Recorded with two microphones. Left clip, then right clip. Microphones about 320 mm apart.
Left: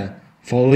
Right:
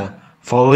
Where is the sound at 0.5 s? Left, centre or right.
Right.